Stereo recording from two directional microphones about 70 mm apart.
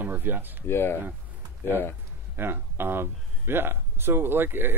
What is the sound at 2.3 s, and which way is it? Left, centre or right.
Speech, right.